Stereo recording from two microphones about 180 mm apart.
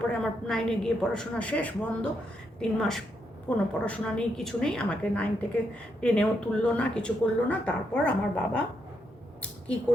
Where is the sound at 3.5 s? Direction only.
10° left (ahead or behind).